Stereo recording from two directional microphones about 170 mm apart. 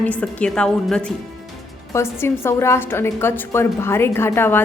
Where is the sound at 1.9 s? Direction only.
15° left (ahead or behind).